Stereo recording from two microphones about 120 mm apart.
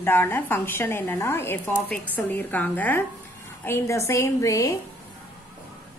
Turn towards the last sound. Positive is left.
turn(degrees=25)  # may be behind; listen again after turning